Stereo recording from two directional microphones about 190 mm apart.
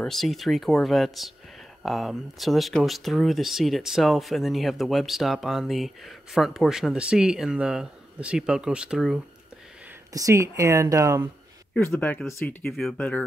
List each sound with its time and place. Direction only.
0.0 s speech: centre (ahead or behind)
10.1 s speech: 15° right (ahead or behind)
11.7 s speech: 5° left (ahead or behind)